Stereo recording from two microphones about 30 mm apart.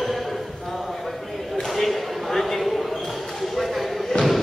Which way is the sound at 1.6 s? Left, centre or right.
Centre.